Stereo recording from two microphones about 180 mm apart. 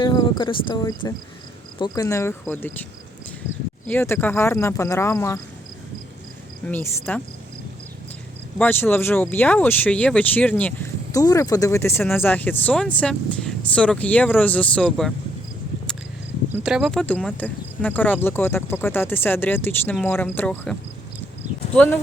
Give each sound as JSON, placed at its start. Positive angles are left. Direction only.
{"t": 0.0, "sound": "speech", "side_deg": 25}
{"t": 3.8, "sound": "speech", "side_deg": 10}
{"t": 6.7, "sound": "speech", "side_deg": 10}
{"t": 8.5, "sound": "speech", "side_deg": 10}
{"t": 16.5, "sound": "speech", "side_deg": -5}